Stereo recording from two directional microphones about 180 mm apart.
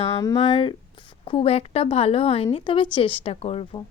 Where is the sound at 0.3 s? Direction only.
30° left (ahead or behind).